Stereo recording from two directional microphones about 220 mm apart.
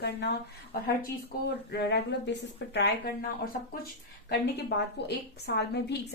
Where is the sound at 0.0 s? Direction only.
50° left (ahead or behind).